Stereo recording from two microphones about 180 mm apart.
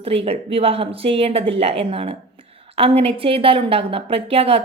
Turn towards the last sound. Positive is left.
turn(degrees=-30)  # may be behind; listen again after turning